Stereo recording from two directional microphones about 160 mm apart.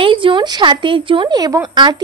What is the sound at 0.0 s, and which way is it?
A woman's voice, 30° right (ahead or behind).